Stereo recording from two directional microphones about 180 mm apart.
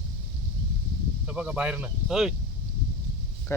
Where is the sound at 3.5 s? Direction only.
15° left (ahead or behind).